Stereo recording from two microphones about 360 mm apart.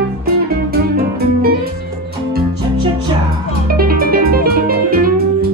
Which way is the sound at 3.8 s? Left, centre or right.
Right.